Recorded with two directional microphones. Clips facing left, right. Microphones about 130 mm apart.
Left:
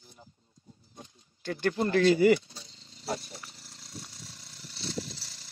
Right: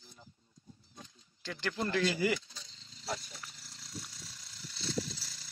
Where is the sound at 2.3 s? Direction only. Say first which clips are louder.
Left 6 dB; 35° left (ahead or behind).